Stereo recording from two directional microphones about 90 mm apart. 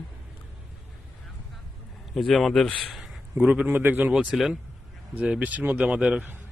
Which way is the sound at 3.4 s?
10° right (ahead or behind).